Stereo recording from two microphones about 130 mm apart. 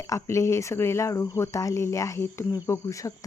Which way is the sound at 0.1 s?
20° left (ahead or behind).